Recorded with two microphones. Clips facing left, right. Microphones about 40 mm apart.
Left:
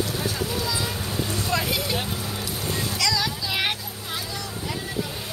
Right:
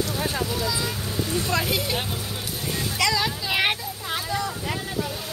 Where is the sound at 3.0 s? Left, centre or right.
Right.